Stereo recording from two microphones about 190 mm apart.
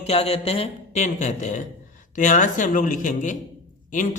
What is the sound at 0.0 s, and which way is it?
A man's voice, 30° left (ahead or behind).